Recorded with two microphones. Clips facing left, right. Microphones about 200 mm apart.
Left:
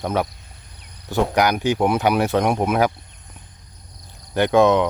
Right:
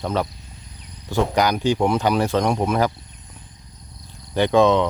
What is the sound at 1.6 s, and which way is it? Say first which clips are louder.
Speech: even; 15° left (ahead or behind).